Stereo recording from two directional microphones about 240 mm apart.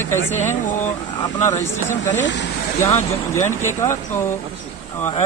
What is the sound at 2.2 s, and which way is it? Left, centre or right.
Speech, left.